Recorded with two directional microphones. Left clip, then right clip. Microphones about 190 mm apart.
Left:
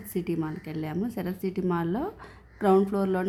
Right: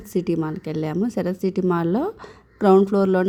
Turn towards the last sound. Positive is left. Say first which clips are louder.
# right 8 dB
turn(degrees=-25)  # may be behind; listen again after turning